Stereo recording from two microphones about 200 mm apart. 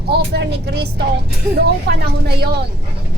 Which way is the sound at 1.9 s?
55° right (ahead or behind).